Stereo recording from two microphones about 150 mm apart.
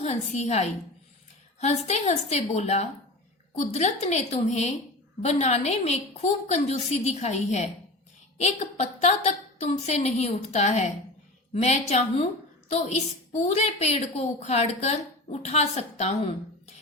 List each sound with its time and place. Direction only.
0.0 s a woman's voice: 45° left (ahead or behind)